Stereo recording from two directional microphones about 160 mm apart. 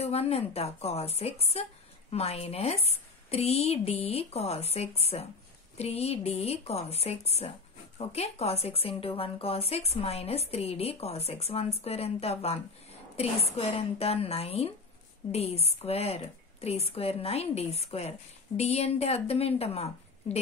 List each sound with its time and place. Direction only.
0.0 s a woman's voice: 40° left (ahead or behind)